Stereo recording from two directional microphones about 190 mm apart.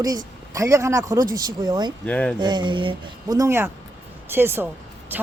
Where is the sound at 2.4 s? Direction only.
25° right (ahead or behind).